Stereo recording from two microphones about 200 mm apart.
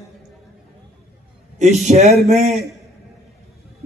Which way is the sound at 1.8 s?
35° right (ahead or behind).